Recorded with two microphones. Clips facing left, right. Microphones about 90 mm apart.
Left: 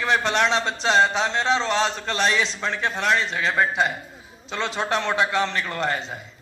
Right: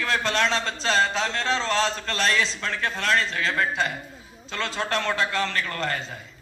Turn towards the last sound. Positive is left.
turn(degrees=20)  # may be behind; listen again after turning